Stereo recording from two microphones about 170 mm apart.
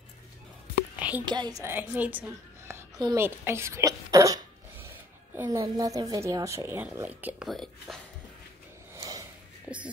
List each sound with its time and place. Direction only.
0.9 s whispering: 10° right (ahead or behind)
1.2 s a woman's voice: 25° right (ahead or behind)
1.6 s a woman's voice: 10° right (ahead or behind)
2.7 s a sound: 25° right (ahead or behind)
3.2 s speech: 15° right (ahead or behind)
7.4 s speech: centre (ahead or behind)
8.9 s snort: 20° right (ahead or behind)